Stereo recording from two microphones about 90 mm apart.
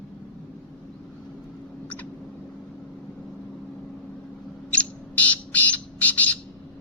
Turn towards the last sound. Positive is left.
turn(degrees=15)  # may be behind; listen again after turning